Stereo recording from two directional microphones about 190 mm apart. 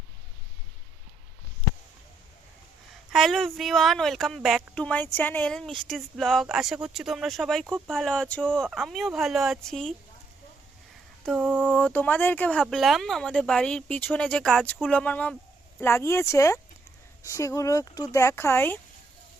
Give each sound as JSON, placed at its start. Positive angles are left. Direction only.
{"t": 3.1, "sound": "speech", "side_deg": 0}
{"t": 11.3, "sound": "speech", "side_deg": 0}